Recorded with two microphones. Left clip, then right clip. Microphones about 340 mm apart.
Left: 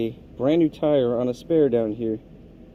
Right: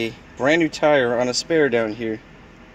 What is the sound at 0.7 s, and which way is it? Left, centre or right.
Speech, centre.